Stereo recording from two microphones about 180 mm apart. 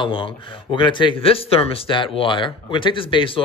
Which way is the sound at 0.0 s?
30° left (ahead or behind).